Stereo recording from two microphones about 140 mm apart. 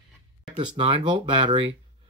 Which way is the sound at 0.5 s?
35° right (ahead or behind).